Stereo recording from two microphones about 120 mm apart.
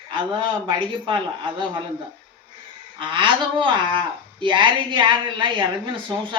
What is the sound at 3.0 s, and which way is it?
Speech, 40° right (ahead or behind).